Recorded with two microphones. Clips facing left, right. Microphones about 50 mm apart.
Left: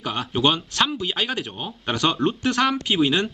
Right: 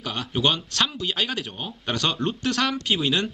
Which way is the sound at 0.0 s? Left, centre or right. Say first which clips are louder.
Left 3 dB; centre.